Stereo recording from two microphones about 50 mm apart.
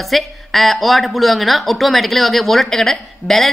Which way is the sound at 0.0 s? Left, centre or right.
Centre.